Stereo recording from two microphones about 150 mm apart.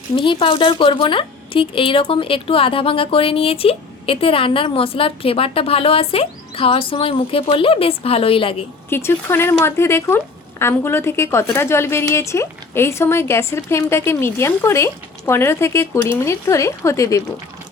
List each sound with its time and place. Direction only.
0.2 s a woman's voice: 35° left (ahead or behind)
8.9 s a woman's voice: 15° left (ahead or behind)